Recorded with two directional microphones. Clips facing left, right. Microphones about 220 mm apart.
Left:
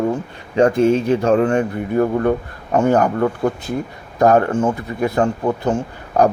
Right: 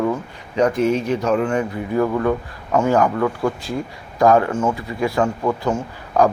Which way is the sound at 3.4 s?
20° left (ahead or behind).